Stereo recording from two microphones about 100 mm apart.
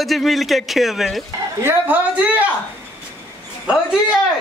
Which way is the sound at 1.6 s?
15° right (ahead or behind).